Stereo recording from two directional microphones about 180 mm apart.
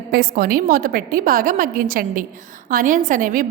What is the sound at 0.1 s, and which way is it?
A woman's voice, 55° right (ahead or behind).